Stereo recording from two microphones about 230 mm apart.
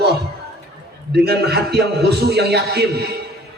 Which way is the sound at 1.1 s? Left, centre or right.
Right.